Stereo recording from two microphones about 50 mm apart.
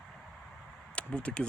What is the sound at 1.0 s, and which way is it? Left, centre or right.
Speech, left.